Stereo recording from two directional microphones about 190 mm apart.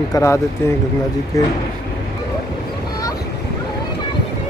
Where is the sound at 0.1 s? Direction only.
15° left (ahead or behind).